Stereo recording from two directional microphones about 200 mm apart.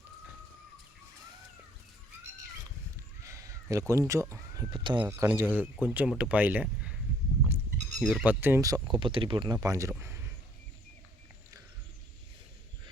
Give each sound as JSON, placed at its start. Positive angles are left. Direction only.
{"t": 3.2, "sound": "speech", "side_deg": -15}
{"t": 7.9, "sound": "speech", "side_deg": 0}
{"t": 10.0, "sound": "a sound", "side_deg": -10}